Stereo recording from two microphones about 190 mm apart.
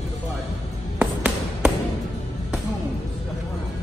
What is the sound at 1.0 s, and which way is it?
Music, 5° right (ahead or behind).